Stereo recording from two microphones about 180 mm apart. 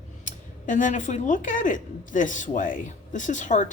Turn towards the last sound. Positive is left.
turn(degrees=45)  # may be behind; listen again after turning